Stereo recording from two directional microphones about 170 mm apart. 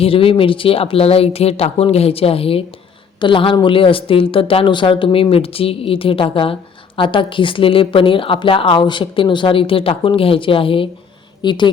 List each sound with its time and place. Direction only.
0.0 s a woman's voice: 35° left (ahead or behind)